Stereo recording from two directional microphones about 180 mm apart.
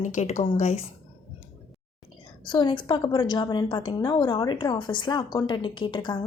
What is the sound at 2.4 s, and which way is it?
A woman's voice, 25° left (ahead or behind).